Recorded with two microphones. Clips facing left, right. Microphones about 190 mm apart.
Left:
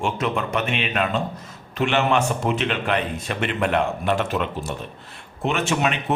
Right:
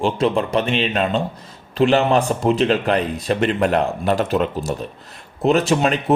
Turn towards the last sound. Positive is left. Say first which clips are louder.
# right 6 dB
turn(degrees=-35)  # may be behind; listen again after turning